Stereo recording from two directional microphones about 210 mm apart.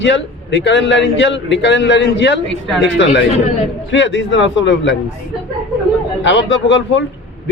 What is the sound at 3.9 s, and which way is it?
A man's voice, 60° left (ahead or behind).